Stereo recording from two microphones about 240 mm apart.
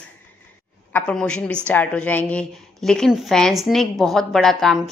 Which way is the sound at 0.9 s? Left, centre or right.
Centre.